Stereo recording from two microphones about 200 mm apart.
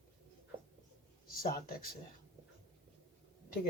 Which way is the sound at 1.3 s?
45° left (ahead or behind).